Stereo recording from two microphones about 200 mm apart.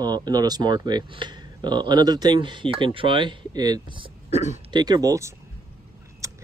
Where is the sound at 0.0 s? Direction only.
20° right (ahead or behind).